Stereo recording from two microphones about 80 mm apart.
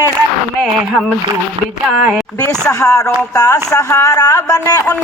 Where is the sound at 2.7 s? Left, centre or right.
Left.